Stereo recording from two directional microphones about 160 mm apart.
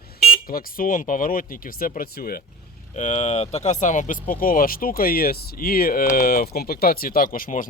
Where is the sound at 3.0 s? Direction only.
45° left (ahead or behind).